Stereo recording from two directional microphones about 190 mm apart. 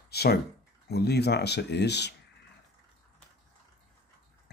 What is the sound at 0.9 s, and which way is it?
Speech, 60° left (ahead or behind).